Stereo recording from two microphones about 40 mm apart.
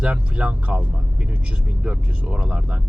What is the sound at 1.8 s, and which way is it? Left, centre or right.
Speech, right.